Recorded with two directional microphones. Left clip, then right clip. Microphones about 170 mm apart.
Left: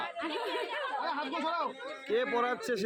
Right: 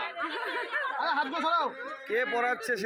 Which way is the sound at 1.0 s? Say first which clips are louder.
Right 5 dB; 25° right (ahead or behind).